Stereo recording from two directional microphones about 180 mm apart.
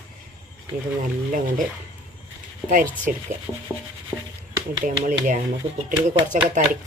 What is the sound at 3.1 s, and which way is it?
Speech, 50° right (ahead or behind).